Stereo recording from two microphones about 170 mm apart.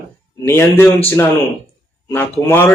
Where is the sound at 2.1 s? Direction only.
10° left (ahead or behind).